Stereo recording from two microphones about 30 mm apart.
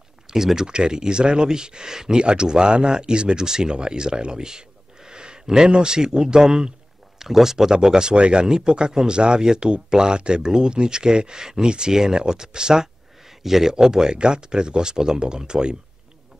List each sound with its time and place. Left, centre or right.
0.3 s speech: centre
0.7 s speech: right
7.2 s speech: centre
13.4 s speech: centre; by 15.7 s right